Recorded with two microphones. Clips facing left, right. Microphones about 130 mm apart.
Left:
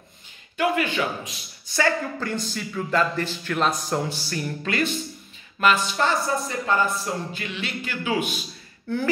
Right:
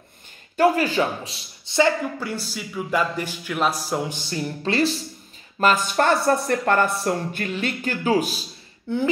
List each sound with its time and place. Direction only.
0.6 s a man's voice: 35° right (ahead or behind)
2.1 s speech: 10° right (ahead or behind)
4.1 s speech: 20° right (ahead or behind)
5.6 s speech: 45° right (ahead or behind)
8.8 s speech: 20° right (ahead or behind)